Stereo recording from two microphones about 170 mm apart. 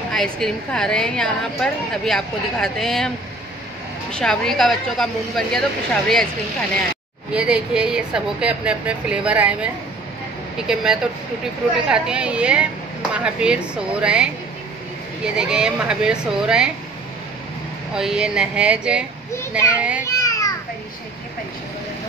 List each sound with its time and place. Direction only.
0.1 s a woman's voice: 5° left (ahead or behind)
4.1 s a woman's voice: 5° left (ahead or behind)
7.3 s a woman's voice: 5° right (ahead or behind)
10.7 s a woman's voice: 5° right (ahead or behind)
17.9 s a woman's voice: 5° right (ahead or behind)
20.1 s children playing: 20° left (ahead or behind)